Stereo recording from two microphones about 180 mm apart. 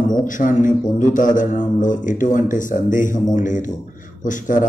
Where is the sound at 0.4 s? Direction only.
45° left (ahead or behind).